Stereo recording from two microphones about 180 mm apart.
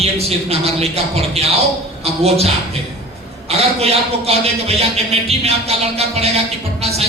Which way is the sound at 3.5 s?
35° right (ahead or behind).